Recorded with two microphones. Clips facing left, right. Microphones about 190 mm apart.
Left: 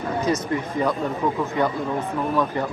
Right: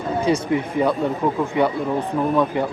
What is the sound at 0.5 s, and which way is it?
Speech, 15° right (ahead or behind).